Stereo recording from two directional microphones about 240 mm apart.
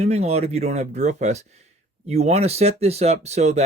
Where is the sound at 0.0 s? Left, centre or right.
Right.